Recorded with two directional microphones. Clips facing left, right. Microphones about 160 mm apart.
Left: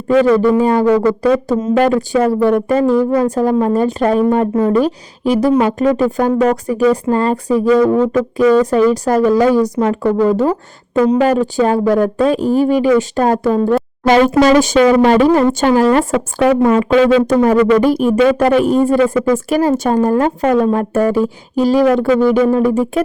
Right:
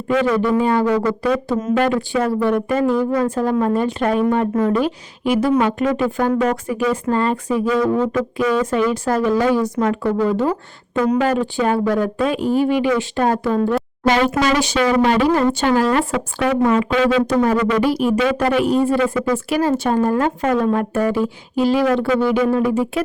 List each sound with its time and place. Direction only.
0.1 s a woman's voice: 35° left (ahead or behind)